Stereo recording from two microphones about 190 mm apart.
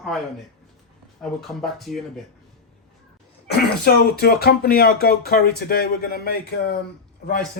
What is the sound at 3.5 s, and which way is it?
Speech, 60° left (ahead or behind).